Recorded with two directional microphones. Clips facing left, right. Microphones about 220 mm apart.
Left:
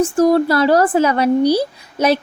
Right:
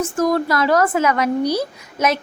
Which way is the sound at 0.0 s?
30° left (ahead or behind).